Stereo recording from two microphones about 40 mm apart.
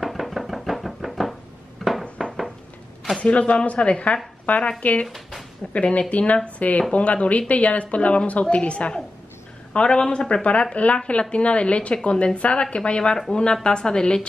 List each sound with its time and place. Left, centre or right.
0.0 s knock: centre
1.8 s a sound: centre
3.2 s a woman's voice: left
5.0 s speech: centre
5.7 s a woman's voice: left; by 14.2 s centre